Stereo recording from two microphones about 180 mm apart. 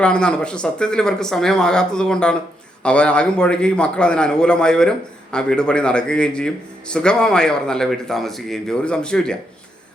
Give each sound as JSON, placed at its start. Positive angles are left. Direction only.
{"t": 0.0, "sound": "a man's voice", "side_deg": 5}